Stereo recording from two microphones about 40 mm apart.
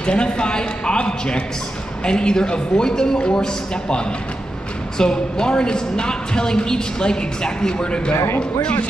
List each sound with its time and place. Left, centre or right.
0.0 s speech: left
4.9 s speech: centre